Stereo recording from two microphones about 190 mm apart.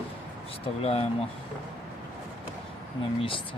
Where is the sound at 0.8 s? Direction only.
30° left (ahead or behind).